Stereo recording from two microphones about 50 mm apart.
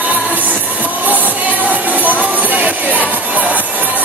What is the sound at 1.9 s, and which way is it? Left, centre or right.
Music, right.